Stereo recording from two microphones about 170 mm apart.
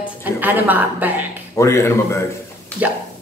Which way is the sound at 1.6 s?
15° left (ahead or behind).